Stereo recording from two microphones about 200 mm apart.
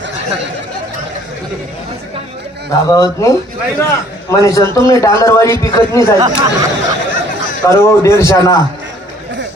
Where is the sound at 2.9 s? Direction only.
15° left (ahead or behind).